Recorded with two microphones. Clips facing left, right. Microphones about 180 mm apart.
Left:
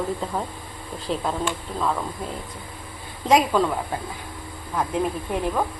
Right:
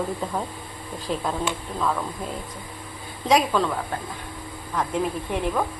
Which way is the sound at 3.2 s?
10° left (ahead or behind).